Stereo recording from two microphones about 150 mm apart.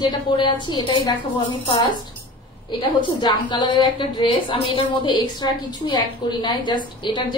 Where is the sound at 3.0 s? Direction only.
30° left (ahead or behind).